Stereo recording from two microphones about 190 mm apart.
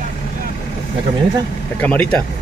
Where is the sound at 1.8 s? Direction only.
10° left (ahead or behind).